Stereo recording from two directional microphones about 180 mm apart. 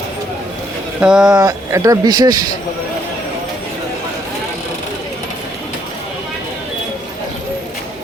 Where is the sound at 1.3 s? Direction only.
20° right (ahead or behind).